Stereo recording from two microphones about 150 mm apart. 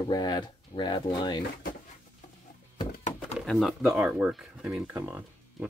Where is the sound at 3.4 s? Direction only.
5° left (ahead or behind).